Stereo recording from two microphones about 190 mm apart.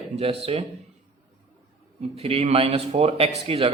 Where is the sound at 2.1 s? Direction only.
30° right (ahead or behind).